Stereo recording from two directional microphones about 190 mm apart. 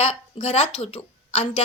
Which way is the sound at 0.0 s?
30° left (ahead or behind).